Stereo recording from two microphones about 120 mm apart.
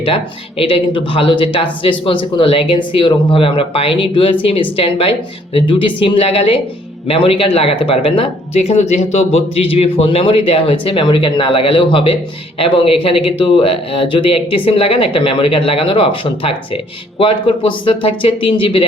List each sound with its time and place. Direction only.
0.6 s speech: 50° left (ahead or behind)